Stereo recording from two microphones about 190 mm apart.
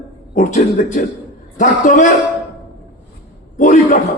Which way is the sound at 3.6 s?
45° left (ahead or behind).